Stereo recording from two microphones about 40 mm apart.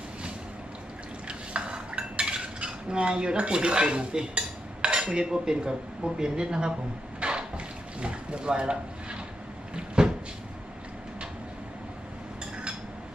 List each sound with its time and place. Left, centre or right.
1.3 s cutlery: right
6.1 s speech: right
7.2 s a sound: right
8.0 s speech: right
9.7 s cupboard open or close: right